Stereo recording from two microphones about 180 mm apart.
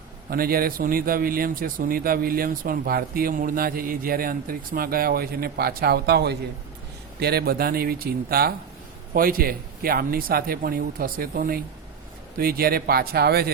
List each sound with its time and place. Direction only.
0.3 s speech: 55° right (ahead or behind)